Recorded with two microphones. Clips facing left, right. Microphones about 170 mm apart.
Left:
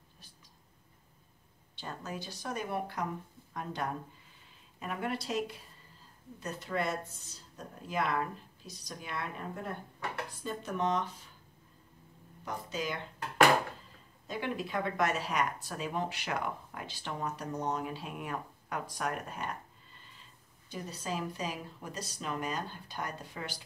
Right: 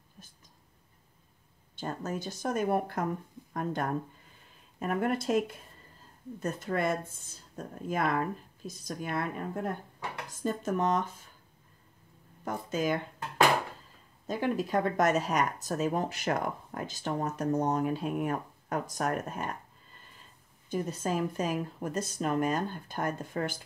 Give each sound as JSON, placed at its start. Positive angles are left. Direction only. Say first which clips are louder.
{"t": 1.8, "sound": "speech", "louder": "right 6 dB", "side_deg": -45}
{"t": 12.4, "sound": "speech", "louder": "right 7 dB", "side_deg": -50}
{"t": 14.2, "sound": "speech", "louder": "right 6 dB", "side_deg": -45}
{"t": 20.7, "sound": "speech", "louder": "right 7 dB", "side_deg": -50}